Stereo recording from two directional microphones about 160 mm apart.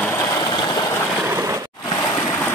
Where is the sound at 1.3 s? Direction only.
20° right (ahead or behind).